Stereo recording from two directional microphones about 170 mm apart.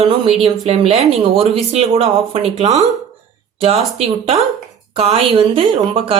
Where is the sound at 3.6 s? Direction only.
35° right (ahead or behind).